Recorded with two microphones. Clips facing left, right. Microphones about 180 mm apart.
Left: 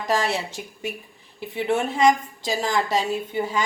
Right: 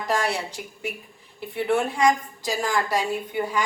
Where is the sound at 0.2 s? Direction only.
20° left (ahead or behind).